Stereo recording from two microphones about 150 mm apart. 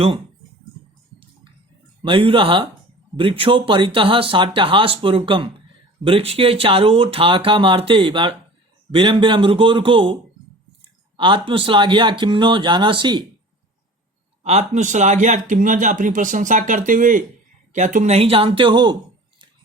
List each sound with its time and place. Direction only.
2.0 s speech: 35° right (ahead or behind)
11.2 s speech: 35° right (ahead or behind)
14.4 s a man's voice: 45° right (ahead or behind)